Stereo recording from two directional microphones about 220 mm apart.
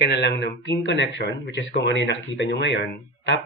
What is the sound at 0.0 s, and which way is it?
A man's voice, 50° left (ahead or behind).